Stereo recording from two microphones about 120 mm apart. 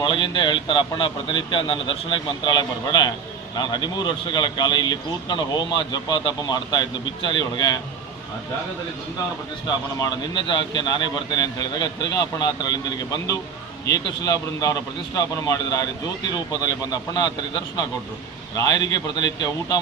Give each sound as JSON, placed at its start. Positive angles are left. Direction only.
{"t": 0.0, "sound": "a man's voice", "side_deg": 40}
{"t": 9.6, "sound": "a man's voice", "side_deg": 35}